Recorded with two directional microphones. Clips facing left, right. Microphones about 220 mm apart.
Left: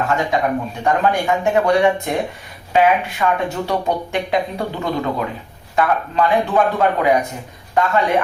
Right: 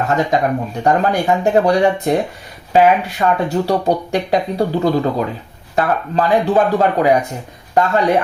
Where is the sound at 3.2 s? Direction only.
35° right (ahead or behind).